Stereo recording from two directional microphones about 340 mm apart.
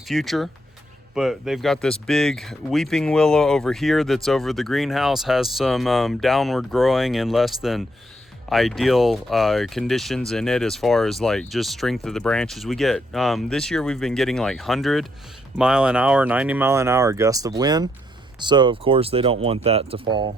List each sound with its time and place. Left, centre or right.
0.1 s speech: centre